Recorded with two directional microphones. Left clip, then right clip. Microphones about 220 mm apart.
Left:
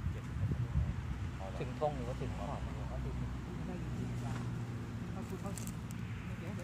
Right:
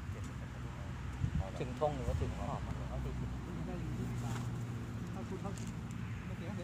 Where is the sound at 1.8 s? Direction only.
40° right (ahead or behind).